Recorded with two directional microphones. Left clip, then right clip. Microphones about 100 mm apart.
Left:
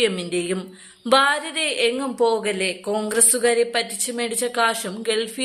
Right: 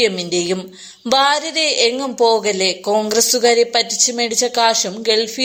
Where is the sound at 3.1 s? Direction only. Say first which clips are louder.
Right 5 dB; 25° right (ahead or behind).